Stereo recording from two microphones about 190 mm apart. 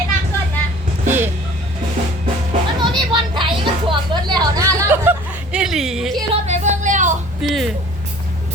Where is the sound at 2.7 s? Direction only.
25° right (ahead or behind); by 6.2 s centre (ahead or behind).